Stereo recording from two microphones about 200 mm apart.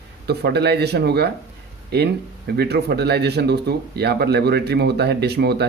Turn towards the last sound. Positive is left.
turn(degrees=-55)  # may be behind; listen again after turning